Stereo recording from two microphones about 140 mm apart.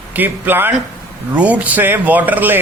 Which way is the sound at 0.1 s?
15° right (ahead or behind).